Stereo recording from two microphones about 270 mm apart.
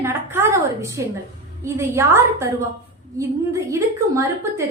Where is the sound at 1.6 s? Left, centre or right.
Centre.